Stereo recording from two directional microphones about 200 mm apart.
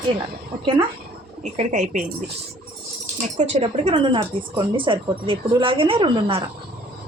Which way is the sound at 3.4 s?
35° right (ahead or behind).